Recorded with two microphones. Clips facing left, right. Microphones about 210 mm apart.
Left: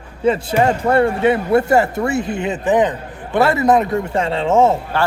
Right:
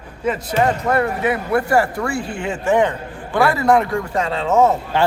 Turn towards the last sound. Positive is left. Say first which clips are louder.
# left 2 dB
turn(degrees=30)  # may be behind; listen again after turning